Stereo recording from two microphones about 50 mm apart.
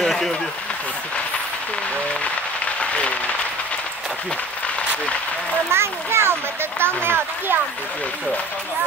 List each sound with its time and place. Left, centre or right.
0.0 s vehicle: centre
2.8 s applause: left
5.7 s a sound: right
6.8 s speech: right